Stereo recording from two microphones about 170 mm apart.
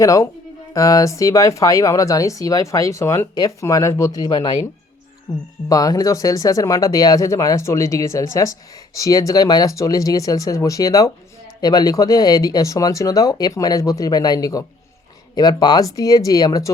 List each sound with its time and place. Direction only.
0.0 s speech: 20° left (ahead or behind)